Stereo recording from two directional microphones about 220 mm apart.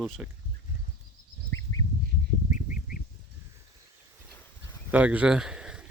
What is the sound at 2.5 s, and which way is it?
Bird, 35° left (ahead or behind).